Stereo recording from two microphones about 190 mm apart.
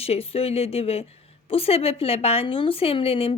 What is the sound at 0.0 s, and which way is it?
A woman's voice, 30° left (ahead or behind).